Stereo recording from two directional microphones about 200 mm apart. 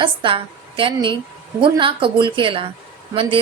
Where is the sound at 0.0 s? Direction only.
25° right (ahead or behind).